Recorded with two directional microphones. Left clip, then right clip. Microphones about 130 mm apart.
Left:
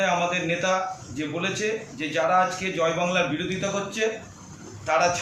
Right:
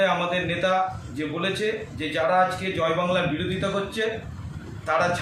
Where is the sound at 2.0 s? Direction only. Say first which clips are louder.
Even; 20° right (ahead or behind).